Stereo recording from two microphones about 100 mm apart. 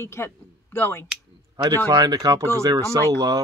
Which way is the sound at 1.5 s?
40° right (ahead or behind).